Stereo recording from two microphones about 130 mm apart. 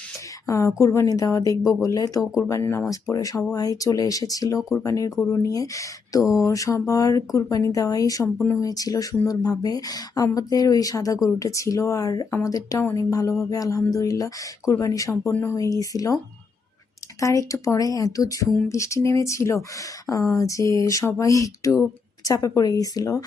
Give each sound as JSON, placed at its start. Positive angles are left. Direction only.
{"t": 0.4, "sound": "speech", "side_deg": 25}
{"t": 15.3, "sound": "speech", "side_deg": 15}
{"t": 15.5, "sound": "speech", "side_deg": 25}
{"t": 17.2, "sound": "speech", "side_deg": 25}